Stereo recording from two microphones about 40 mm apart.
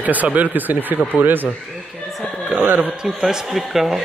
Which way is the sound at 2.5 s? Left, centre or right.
Right.